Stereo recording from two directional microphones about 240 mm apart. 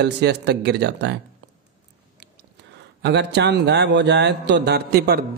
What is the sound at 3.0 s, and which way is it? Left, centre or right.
Speech, right.